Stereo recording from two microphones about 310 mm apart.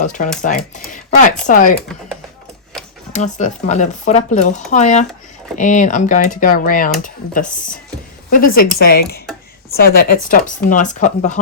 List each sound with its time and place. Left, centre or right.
0.0 s speech: left
3.1 s speech: left